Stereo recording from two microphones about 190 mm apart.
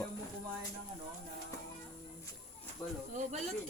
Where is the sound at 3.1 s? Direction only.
40° right (ahead or behind).